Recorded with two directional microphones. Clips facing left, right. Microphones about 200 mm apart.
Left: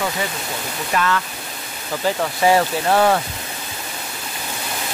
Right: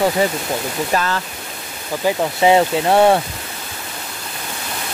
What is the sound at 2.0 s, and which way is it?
Speech, 20° right (ahead or behind).